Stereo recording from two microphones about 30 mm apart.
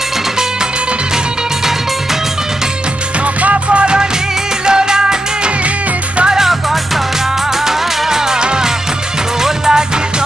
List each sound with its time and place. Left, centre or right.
3.4 s music: right
7.6 s music: centre
9.4 s music: right